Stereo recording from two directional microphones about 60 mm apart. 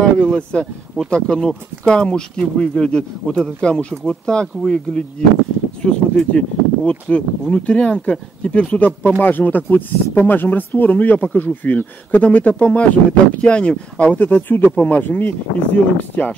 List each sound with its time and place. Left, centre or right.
0.5 s speech: centre